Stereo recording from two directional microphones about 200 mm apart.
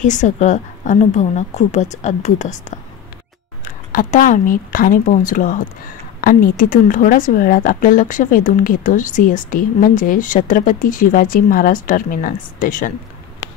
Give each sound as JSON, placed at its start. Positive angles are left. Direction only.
{"t": 0.0, "sound": "a woman's voice", "side_deg": 35}